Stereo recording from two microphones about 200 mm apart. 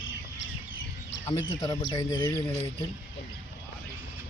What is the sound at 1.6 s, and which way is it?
Speech, 25° left (ahead or behind).